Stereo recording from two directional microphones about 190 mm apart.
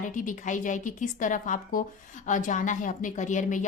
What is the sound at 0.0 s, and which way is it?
A woman's voice, 45° left (ahead or behind).